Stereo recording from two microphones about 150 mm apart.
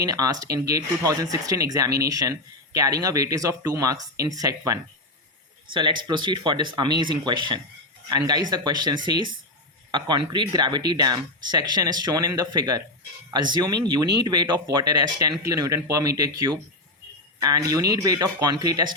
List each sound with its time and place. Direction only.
0.0 s speech: 25° right (ahead or behind)